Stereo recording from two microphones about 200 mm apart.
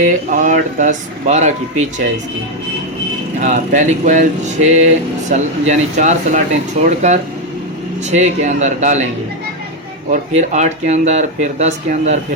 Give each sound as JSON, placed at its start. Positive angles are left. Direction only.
{"t": 0.0, "sound": "speech", "side_deg": -40}
{"t": 3.4, "sound": "speech", "side_deg": -40}
{"t": 10.1, "sound": "speech", "side_deg": -35}